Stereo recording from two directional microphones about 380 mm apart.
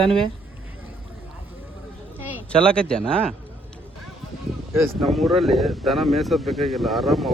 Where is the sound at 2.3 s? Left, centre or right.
Centre.